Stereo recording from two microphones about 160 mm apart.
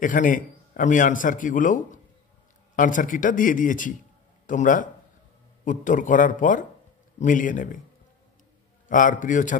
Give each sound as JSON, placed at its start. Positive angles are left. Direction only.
{"t": 0.0, "sound": "a man's voice", "side_deg": 55}
{"t": 8.8, "sound": "a man's voice", "side_deg": 55}